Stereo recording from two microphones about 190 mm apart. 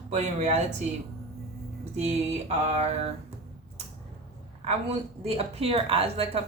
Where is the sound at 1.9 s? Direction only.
35° right (ahead or behind).